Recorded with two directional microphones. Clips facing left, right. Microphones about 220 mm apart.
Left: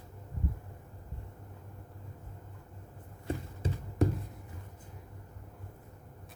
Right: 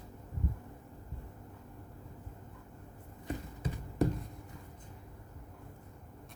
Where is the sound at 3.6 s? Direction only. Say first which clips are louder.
Left 3 dB; 25° left (ahead or behind).